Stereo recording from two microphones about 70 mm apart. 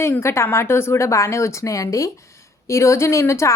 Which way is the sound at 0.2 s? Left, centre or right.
Left.